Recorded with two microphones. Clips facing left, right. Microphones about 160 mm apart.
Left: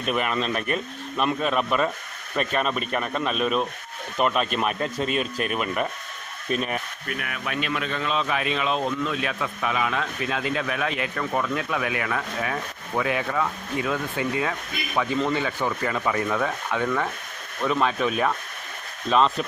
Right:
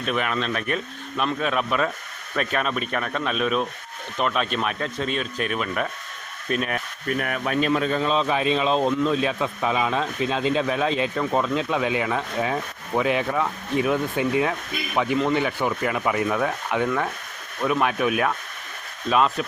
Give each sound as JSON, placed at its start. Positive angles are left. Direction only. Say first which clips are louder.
{"t": 0.0, "sound": "speech", "louder": "even", "side_deg": 0}
{"t": 7.2, "sound": "speech", "louder": "right 6 dB", "side_deg": -45}